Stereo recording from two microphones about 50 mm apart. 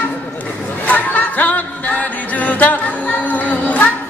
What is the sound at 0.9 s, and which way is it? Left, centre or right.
Music, left.